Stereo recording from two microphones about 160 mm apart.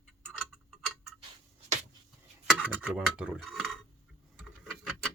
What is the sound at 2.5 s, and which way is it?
Clock, 5° right (ahead or behind).